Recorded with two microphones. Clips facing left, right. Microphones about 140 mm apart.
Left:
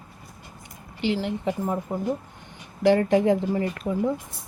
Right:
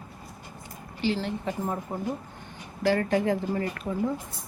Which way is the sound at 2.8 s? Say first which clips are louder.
Left 5 dB; 20° left (ahead or behind).